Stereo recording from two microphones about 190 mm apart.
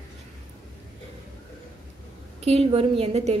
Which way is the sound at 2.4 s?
30° right (ahead or behind).